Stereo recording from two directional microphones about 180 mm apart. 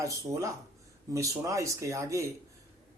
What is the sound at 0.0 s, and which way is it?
Speech, 15° right (ahead or behind).